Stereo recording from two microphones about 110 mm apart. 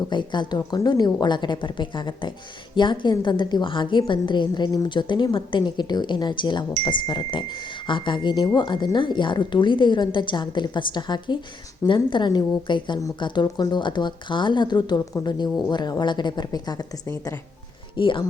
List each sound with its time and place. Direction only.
0.1 s a woman's voice: 45° left (ahead or behind)
17.9 s speech: 50° left (ahead or behind)